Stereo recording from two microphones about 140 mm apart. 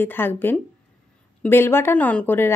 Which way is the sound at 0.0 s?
15° left (ahead or behind).